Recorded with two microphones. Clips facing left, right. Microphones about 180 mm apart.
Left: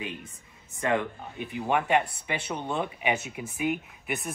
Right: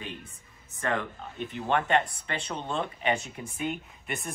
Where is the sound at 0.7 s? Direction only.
15° left (ahead or behind).